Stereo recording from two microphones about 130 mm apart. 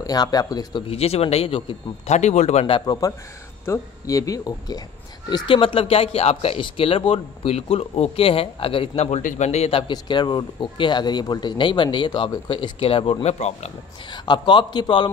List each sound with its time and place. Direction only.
0.0 s a man's voice: 30° left (ahead or behind)
0.8 s speech: 50° left (ahead or behind)
2.6 s a man's voice: 40° left (ahead or behind)
5.3 s speech: 40° left (ahead or behind); by 13.7 s 60° left (ahead or behind)
14.1 s a man's voice: 35° left (ahead or behind)